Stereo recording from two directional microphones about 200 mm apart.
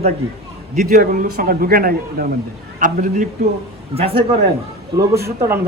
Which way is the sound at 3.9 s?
30° right (ahead or behind).